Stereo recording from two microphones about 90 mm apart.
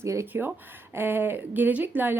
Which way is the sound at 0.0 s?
30° right (ahead or behind).